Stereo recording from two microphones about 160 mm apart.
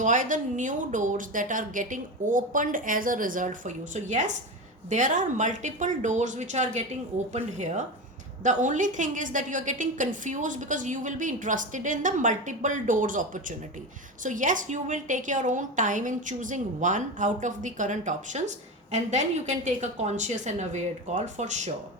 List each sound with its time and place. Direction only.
0.0 s a woman's voice: 55° right (ahead or behind)